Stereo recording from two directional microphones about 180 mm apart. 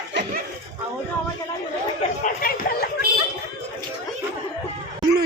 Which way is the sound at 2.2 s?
55° left (ahead or behind).